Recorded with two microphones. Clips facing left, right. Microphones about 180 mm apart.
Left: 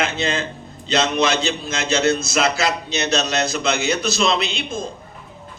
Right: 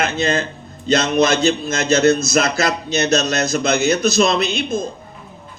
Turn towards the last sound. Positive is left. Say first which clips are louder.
# right 4 dB
turn(degrees=-40)  # may be behind; listen again after turning